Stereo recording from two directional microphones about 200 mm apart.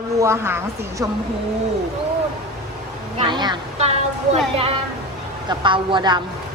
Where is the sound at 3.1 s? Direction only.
25° right (ahead or behind).